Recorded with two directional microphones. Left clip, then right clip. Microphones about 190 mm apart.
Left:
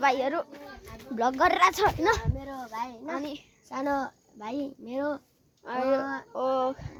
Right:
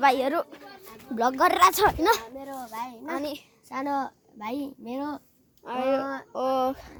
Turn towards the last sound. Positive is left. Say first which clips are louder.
# right 2 dB
turn(degrees=-35)  # may be behind; listen again after turning